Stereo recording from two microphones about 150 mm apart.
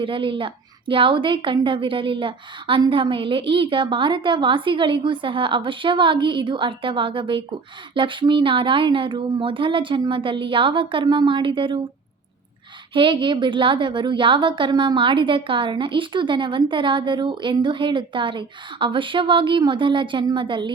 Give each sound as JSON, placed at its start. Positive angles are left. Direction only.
{"t": 0.0, "sound": "a woman's voice", "side_deg": -35}
{"t": 12.9, "sound": "a woman's voice", "side_deg": -35}